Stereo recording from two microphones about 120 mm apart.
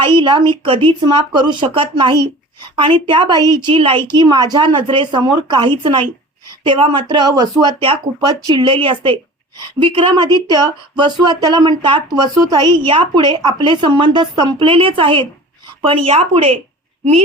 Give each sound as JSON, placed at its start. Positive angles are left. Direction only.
{"t": 0.2, "sound": "speech", "side_deg": -40}